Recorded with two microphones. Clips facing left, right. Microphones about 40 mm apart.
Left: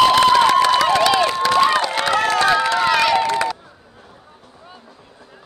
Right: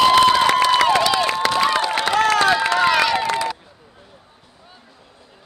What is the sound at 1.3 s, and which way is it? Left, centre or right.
Crowd, right.